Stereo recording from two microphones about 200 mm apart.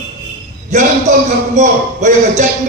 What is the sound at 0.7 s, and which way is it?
A man's voice, 35° right (ahead or behind).